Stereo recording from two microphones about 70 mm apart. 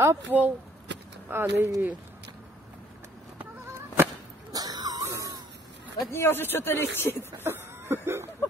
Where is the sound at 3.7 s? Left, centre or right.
Right.